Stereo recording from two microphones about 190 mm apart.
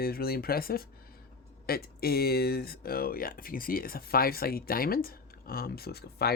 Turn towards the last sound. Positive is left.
turn(degrees=55)  # may be behind; listen again after turning